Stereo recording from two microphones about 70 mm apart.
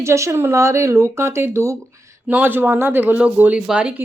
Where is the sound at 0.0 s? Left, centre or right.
Right.